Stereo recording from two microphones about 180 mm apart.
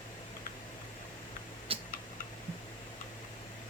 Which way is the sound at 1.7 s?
30° right (ahead or behind).